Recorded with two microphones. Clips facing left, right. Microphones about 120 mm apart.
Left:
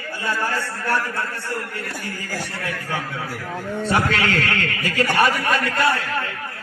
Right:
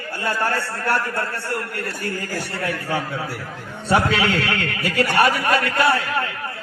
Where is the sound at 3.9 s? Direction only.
5° right (ahead or behind).